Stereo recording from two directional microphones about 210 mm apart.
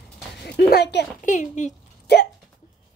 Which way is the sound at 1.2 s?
35° left (ahead or behind).